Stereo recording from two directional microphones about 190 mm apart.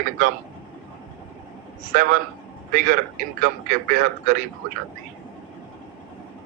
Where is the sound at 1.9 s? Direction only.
45° right (ahead or behind).